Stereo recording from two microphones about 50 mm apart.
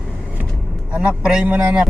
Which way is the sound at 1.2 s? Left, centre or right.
Centre.